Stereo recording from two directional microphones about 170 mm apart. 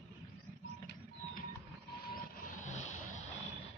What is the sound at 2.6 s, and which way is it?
Vehicle, 45° left (ahead or behind).